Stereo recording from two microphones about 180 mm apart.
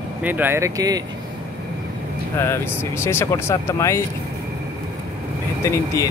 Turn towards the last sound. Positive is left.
turn(degrees=15)  # may be behind; listen again after turning